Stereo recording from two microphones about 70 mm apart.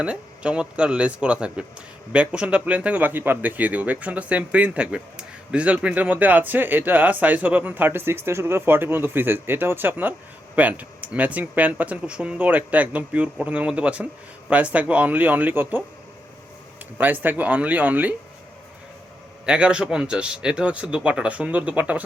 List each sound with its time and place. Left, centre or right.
0.0 s speech: centre
17.0 s speech: right
19.5 s speech: centre